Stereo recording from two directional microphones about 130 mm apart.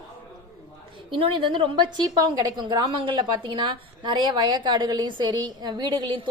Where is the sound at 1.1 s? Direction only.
40° right (ahead or behind).